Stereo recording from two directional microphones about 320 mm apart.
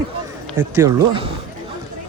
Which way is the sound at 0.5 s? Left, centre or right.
Centre.